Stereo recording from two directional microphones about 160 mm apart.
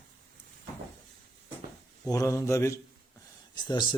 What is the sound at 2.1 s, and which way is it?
Mantra, 20° left (ahead or behind).